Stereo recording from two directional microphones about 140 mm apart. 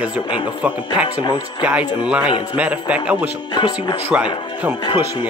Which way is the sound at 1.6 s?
10° right (ahead or behind).